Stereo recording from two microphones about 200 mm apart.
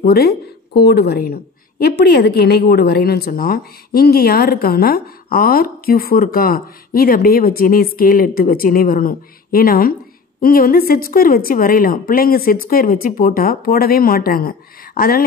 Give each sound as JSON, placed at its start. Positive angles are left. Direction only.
{"t": 0.0, "sound": "a woman's voice", "side_deg": 50}